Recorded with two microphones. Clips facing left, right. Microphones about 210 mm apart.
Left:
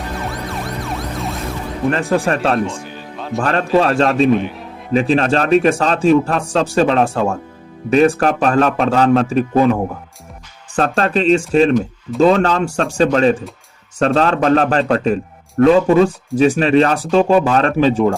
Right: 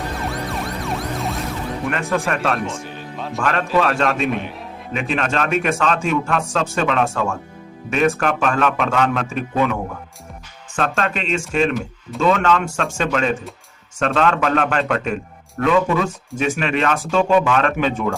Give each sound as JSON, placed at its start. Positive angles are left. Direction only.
{"t": 0.3, "sound": "emergency vehicle", "side_deg": 0}
{"t": 1.9, "sound": "a man's voice", "side_deg": 30}
{"t": 2.6, "sound": "speech", "side_deg": 0}
{"t": 3.4, "sound": "a man's voice", "side_deg": 30}
{"t": 4.3, "sound": "speech", "side_deg": 0}
{"t": 4.9, "sound": "a man's voice", "side_deg": 35}